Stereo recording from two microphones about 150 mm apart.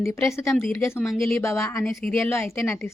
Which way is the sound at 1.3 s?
20° left (ahead or behind).